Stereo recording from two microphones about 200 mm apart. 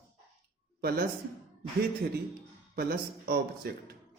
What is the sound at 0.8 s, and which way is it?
Speech, 50° right (ahead or behind).